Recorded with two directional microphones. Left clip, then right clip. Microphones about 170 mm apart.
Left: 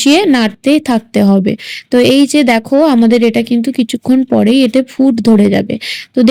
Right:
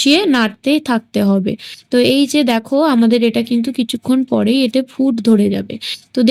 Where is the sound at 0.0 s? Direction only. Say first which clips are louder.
Left 3 dB; 15° left (ahead or behind).